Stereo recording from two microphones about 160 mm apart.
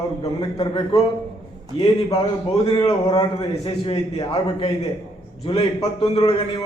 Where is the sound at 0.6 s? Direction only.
25° left (ahead or behind).